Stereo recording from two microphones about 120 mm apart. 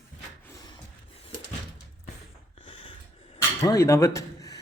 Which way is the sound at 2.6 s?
45° left (ahead or behind).